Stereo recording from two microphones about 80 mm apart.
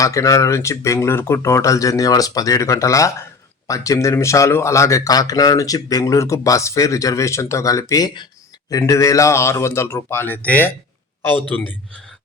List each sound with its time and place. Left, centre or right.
0.0 s speech: left
8.0 s speech: left
8.9 s speech: left